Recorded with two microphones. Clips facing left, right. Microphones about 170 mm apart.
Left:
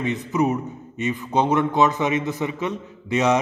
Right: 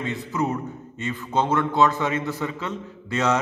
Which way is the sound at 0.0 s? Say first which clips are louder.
Left 4 dB; 20° left (ahead or behind).